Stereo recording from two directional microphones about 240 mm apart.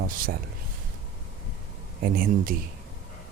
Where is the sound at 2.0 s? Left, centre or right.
Right.